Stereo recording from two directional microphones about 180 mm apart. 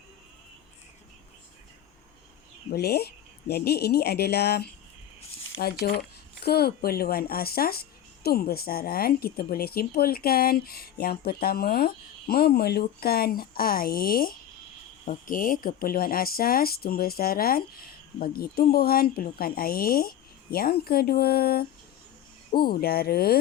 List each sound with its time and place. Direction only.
2.7 s speech: 60° left (ahead or behind)